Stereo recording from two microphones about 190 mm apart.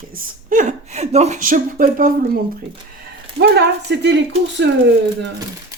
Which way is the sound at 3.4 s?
60° right (ahead or behind).